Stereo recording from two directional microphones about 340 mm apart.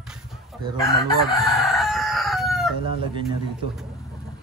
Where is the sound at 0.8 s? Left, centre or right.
Centre.